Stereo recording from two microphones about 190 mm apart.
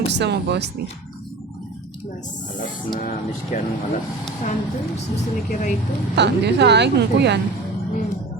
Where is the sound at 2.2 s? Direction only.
40° left (ahead or behind).